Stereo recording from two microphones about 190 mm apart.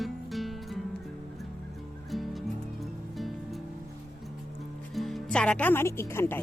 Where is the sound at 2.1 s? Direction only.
Centre (ahead or behind).